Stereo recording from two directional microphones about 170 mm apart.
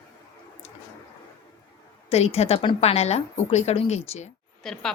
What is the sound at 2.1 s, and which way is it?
A woman's voice, 35° left (ahead or behind).